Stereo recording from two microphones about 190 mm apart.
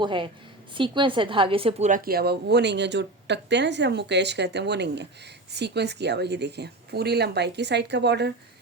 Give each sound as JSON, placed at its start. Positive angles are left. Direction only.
{"t": 0.0, "sound": "a woman's voice", "side_deg": -25}
{"t": 1.9, "sound": "speech", "side_deg": -50}